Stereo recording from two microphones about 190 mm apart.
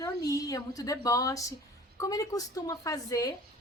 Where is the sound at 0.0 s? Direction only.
20° left (ahead or behind).